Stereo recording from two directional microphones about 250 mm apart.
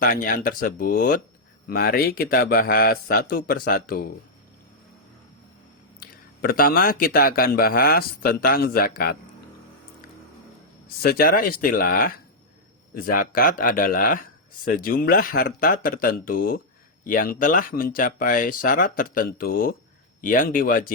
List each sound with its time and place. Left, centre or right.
0.0 s speech: left
6.0 s speech: left
11.0 s speech: left